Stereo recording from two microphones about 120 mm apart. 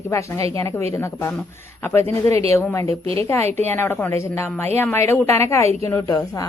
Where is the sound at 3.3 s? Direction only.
20° left (ahead or behind).